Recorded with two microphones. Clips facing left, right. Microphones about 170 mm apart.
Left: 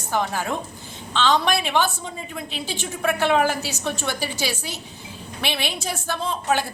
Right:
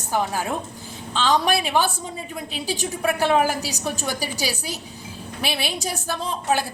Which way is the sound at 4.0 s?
40° right (ahead or behind).